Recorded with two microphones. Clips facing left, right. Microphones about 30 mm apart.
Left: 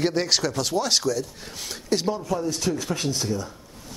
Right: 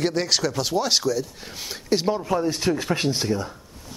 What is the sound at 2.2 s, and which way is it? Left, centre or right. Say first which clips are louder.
Speech: right 3 dB; right.